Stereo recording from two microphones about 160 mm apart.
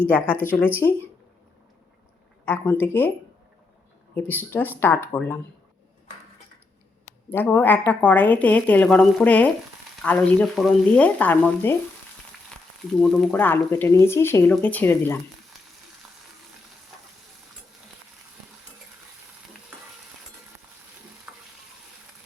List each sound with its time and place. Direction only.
0.3 s a woman's voice: 10° left (ahead or behind)
2.4 s a woman's voice: 15° left (ahead or behind)
4.1 s a woman's voice: 10° left (ahead or behind)
7.3 s a woman's voice: 10° left (ahead or behind)
13.0 s a woman's voice: 5° left (ahead or behind)
21.3 s stir: 10° right (ahead or behind)